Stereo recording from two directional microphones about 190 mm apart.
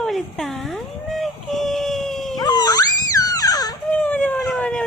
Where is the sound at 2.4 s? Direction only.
20° left (ahead or behind).